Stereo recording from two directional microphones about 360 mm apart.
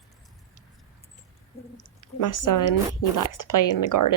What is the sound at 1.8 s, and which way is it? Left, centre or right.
A woman's voice, left.